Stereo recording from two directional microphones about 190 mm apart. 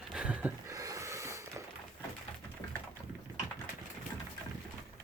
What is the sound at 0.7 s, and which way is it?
Snort, 15° right (ahead or behind).